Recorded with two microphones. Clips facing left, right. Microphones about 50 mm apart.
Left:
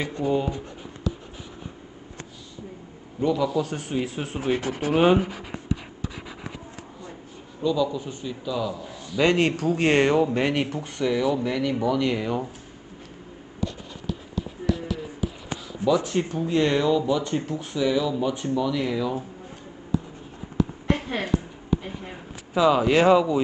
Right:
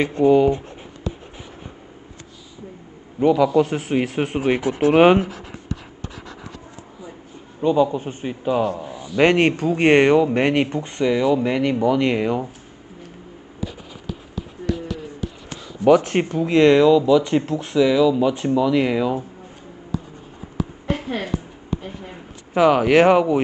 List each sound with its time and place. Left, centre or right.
0.0 s speech: right
3.7 s speech: right
4.6 s speech: centre
4.9 s speech: right
5.2 s writing: centre
7.6 s a man's voice: right
13.6 s a sound: centre
15.8 s speech: right
18.1 s speech: right
21.2 s a sound: centre
22.5 s speech: right